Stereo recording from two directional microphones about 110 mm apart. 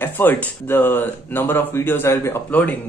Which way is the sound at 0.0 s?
15° left (ahead or behind).